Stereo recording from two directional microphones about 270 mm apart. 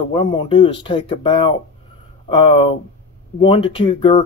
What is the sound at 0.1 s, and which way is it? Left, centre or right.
Speech, centre.